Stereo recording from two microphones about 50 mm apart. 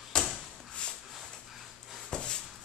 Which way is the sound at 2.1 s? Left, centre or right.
Centre.